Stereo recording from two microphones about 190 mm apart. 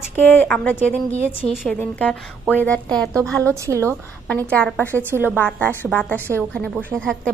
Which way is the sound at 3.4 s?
15° right (ahead or behind).